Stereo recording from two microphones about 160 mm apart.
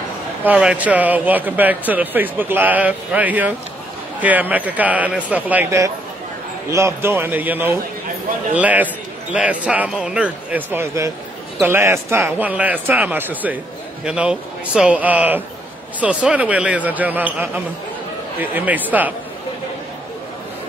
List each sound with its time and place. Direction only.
0.4 s speech: 10° right (ahead or behind)